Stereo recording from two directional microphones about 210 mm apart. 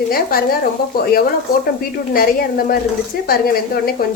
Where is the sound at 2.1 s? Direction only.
45° left (ahead or behind).